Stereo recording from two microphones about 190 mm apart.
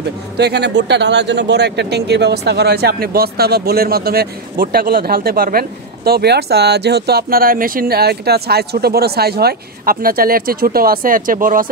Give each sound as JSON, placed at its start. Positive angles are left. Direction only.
{"t": 0.4, "sound": "speech", "side_deg": -60}